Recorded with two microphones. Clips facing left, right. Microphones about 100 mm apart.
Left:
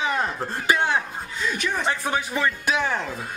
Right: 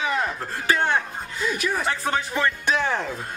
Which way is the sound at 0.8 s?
10° left (ahead or behind).